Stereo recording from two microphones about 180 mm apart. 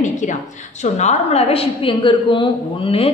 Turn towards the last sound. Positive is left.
turn(degrees=30)  # may be behind; listen again after turning